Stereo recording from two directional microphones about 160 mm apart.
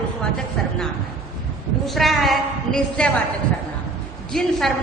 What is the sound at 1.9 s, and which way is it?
A woman's voice, centre (ahead or behind).